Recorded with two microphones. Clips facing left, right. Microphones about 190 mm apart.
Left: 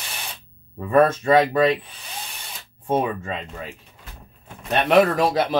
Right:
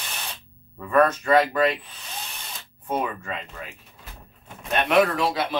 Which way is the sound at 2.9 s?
25° left (ahead or behind).